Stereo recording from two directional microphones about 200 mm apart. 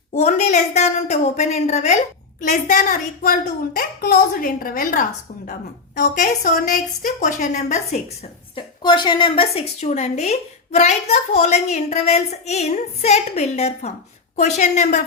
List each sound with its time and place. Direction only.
0.1 s a woman's voice: 35° left (ahead or behind)